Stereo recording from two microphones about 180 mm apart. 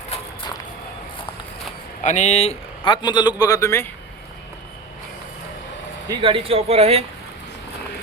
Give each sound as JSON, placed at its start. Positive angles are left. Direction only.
{"t": 0.1, "sound": "a sound", "side_deg": 35}
{"t": 2.0, "sound": "a man's voice", "side_deg": 40}
{"t": 6.1, "sound": "speech", "side_deg": -30}